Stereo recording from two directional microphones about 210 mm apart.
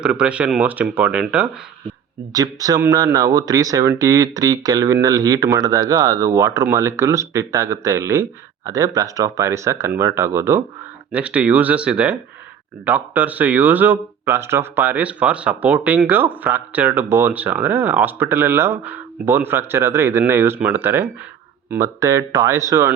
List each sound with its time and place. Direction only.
0.0 s speech: 5° right (ahead or behind)
2.3 s speech: 15° right (ahead or behind)